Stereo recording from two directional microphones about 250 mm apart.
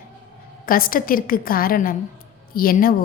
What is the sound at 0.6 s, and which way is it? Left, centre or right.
A woman's voice, left.